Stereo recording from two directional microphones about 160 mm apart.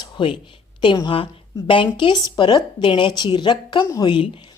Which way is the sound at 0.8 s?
30° left (ahead or behind).